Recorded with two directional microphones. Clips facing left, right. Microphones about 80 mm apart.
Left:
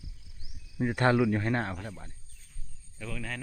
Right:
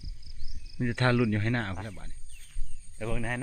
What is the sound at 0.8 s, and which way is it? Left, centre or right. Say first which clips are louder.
Speech: left 1 dB; centre.